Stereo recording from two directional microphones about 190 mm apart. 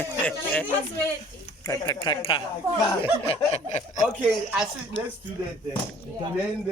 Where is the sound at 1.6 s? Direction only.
20° left (ahead or behind).